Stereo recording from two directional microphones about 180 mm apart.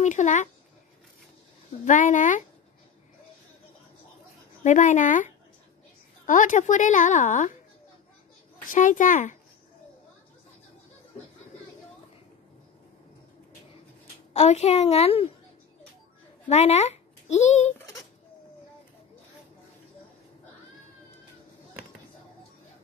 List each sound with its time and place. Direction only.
0.0 s a woman's voice: 40° left (ahead or behind)
1.9 s a woman's voice: 45° left (ahead or behind)
4.6 s a woman's voice: 45° left (ahead or behind)
8.6 s speech: 45° left (ahead or behind)
14.3 s a woman's voice: 40° left (ahead or behind)
16.4 s a child's voice: 35° left (ahead or behind)